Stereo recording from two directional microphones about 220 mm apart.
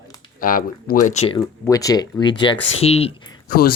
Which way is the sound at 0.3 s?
40° left (ahead or behind).